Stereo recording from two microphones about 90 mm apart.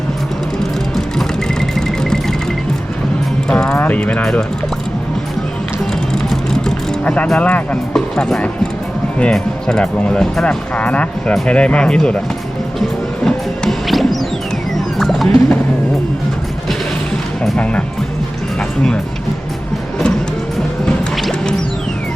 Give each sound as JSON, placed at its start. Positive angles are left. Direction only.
{"t": 3.5, "sound": "speech", "side_deg": 15}
{"t": 6.1, "sound": "vehicle", "side_deg": 5}
{"t": 7.3, "sound": "speech", "side_deg": 15}
{"t": 12.8, "sound": "music", "side_deg": 0}
{"t": 17.6, "sound": "speech", "side_deg": 15}
{"t": 20.8, "sound": "music", "side_deg": 5}